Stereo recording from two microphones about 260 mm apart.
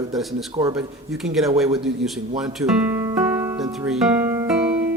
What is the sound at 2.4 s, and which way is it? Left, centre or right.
Music, centre.